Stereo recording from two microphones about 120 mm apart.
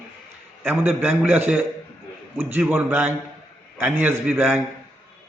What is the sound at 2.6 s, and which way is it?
A man's voice, 10° right (ahead or behind).